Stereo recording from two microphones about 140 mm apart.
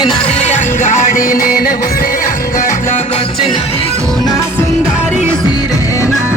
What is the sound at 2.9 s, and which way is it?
Music, 50° left (ahead or behind).